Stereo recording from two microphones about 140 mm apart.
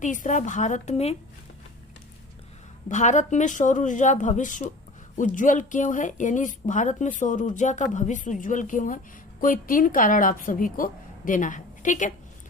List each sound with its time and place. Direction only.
0.0 s speech: 65° left (ahead or behind)
2.9 s a woman's voice: 60° left (ahead or behind)